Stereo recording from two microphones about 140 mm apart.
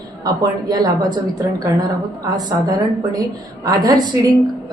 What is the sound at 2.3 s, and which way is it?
A woman's voice, 30° right (ahead or behind).